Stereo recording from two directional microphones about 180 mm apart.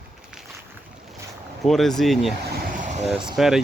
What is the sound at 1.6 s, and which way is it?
Speech, centre (ahead or behind).